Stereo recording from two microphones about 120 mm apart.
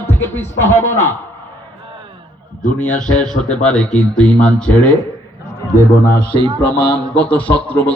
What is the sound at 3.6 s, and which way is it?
Speech, 10° left (ahead or behind).